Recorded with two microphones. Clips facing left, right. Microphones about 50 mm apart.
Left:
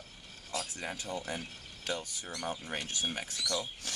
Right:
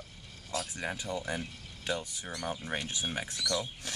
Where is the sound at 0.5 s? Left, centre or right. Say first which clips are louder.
Right 3 dB; right.